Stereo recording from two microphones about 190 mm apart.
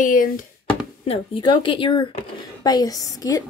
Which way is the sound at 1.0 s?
30° left (ahead or behind).